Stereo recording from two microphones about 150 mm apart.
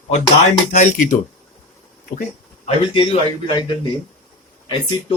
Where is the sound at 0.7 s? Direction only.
55° left (ahead or behind).